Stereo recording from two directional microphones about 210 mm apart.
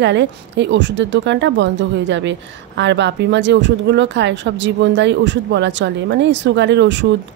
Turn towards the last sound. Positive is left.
turn(degrees=-55)  # may be behind; listen again after turning